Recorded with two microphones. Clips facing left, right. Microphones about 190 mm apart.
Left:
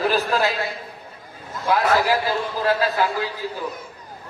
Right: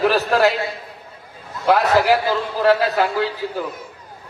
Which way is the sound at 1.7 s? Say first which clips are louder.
Right 4 dB; 70° right (ahead or behind).